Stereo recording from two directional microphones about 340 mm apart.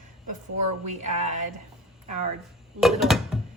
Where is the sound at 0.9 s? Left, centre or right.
Right.